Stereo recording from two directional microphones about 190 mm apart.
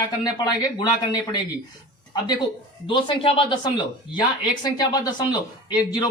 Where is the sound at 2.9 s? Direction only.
25° left (ahead or behind).